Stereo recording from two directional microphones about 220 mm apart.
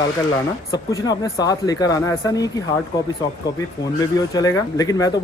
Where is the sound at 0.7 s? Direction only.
15° left (ahead or behind).